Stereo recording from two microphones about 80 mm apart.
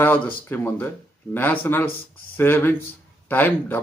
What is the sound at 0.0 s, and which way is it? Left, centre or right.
A man's voice, left.